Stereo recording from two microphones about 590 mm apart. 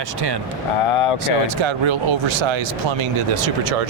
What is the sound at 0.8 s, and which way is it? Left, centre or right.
Speech, left.